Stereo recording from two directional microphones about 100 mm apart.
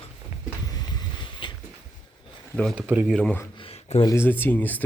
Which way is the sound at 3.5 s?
70° left (ahead or behind).